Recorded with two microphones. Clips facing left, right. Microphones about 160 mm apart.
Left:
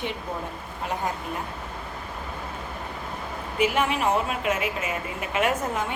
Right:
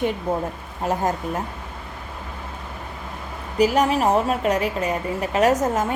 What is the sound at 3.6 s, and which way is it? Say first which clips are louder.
A woman's voice: right 6 dB; 40° right (ahead or behind).